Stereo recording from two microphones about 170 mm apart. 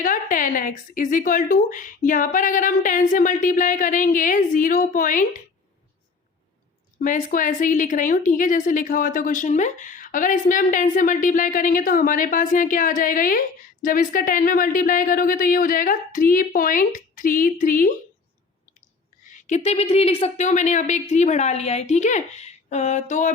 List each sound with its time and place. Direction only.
0.0 s a woman's voice: 50° left (ahead or behind)
7.0 s a woman's voice: 50° left (ahead or behind)
19.2 s a woman's voice: 45° left (ahead or behind)